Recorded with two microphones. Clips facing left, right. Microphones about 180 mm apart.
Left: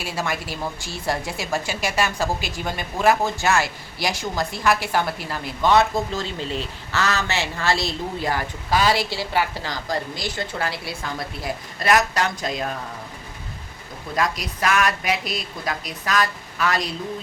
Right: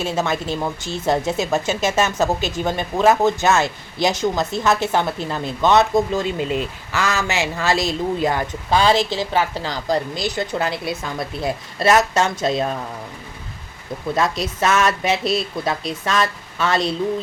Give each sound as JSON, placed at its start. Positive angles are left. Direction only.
{"t": 0.0, "sound": "speech", "side_deg": -20}
{"t": 14.2, "sound": "speech", "side_deg": -25}